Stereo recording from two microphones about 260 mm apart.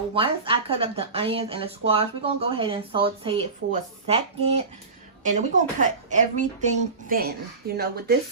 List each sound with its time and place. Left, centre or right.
0.1 s speech: right